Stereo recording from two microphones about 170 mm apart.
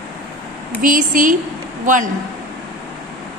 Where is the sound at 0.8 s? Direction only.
50° right (ahead or behind).